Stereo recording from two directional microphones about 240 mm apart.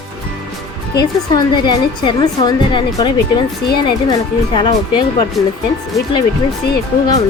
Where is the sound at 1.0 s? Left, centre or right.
Centre.